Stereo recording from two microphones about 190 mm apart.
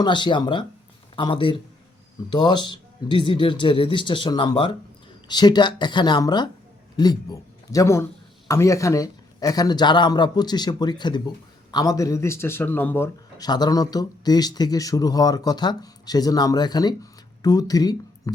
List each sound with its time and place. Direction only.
0.0 s a man's voice: 25° left (ahead or behind)